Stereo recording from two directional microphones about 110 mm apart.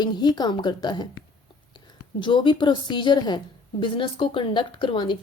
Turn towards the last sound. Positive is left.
turn(degrees=45)  # may be behind; listen again after turning